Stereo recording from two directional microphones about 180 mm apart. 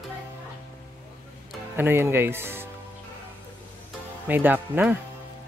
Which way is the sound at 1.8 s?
10° right (ahead or behind).